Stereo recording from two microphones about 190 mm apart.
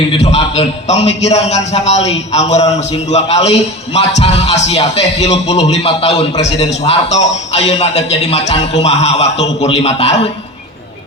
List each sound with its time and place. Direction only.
0.1 s a man's voice: 30° left (ahead or behind)